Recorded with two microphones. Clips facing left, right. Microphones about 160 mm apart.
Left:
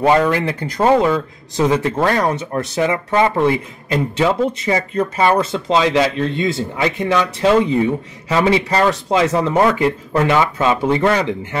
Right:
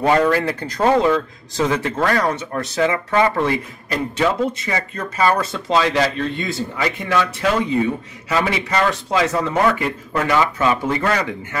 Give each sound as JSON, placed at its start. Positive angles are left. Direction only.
{"t": 0.3, "sound": "speech", "side_deg": 20}
{"t": 8.3, "sound": "speech", "side_deg": 30}